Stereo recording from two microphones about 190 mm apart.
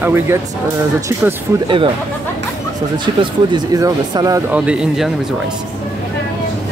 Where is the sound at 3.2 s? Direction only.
20° right (ahead or behind).